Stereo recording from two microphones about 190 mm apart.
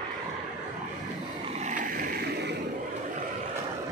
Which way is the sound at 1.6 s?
45° right (ahead or behind).